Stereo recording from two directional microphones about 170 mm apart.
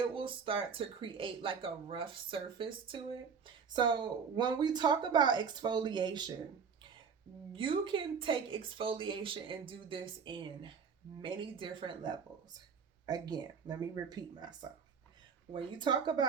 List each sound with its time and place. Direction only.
0.1 s speech: 30° right (ahead or behind)
7.5 s speech: 30° right (ahead or behind)